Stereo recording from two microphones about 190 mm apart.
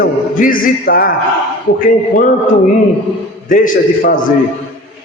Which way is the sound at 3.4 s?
45° left (ahead or behind).